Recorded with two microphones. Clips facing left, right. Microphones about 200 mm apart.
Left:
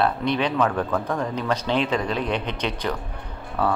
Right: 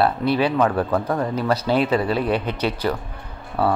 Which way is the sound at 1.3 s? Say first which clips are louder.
Right 4 dB; 5° right (ahead or behind).